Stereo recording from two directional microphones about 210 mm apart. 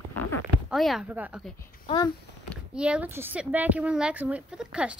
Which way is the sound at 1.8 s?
20° left (ahead or behind).